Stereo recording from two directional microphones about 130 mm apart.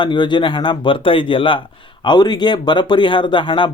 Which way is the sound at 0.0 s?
40° left (ahead or behind).